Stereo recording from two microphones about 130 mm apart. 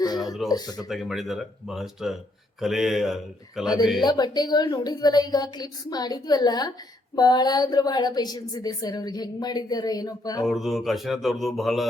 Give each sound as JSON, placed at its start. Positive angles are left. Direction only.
{"t": 0.4, "sound": "speech", "side_deg": 30}
{"t": 0.9, "sound": "speech", "side_deg": 0}
{"t": 4.0, "sound": "a woman's voice", "side_deg": 30}
{"t": 10.4, "sound": "speech", "side_deg": 0}